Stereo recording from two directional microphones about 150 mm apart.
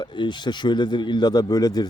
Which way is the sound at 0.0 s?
30° left (ahead or behind).